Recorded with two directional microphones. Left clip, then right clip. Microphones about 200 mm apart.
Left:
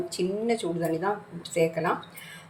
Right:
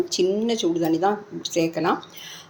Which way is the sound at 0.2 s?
35° right (ahead or behind).